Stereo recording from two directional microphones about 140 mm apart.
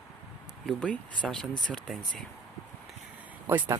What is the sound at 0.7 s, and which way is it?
Speech, 5° left (ahead or behind).